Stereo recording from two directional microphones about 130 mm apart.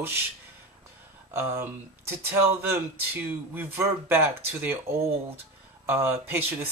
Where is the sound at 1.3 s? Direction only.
20° right (ahead or behind).